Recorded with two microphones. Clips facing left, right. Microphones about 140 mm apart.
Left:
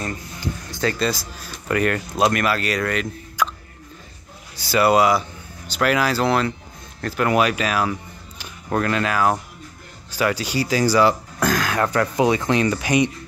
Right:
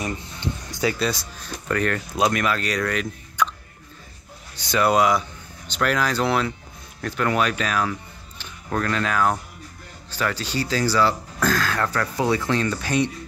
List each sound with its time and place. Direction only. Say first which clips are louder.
0.0 s speech: even; 15° right (ahead or behind); by 3.4 s centre (ahead or behind)
4.6 s speech: left 3 dB; 5° left (ahead or behind)
7.9 s music: left 3 dB; 15° left (ahead or behind)
8.8 s speech: left 2 dB; 5° left (ahead or behind)